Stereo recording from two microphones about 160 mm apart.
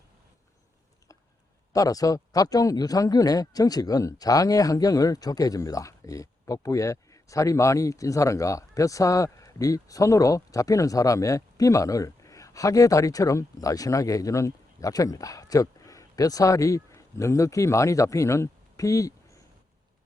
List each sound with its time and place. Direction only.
1.7 s speech: 20° left (ahead or behind)